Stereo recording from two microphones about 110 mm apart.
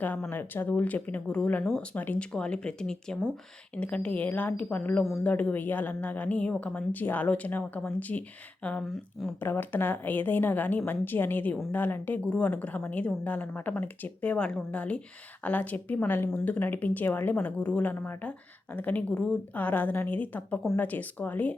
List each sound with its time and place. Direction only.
0.0 s speech: 15° left (ahead or behind)
1.6 s speech: centre (ahead or behind)
2.0 s speech: 10° left (ahead or behind)
9.4 s speech: 20° left (ahead or behind)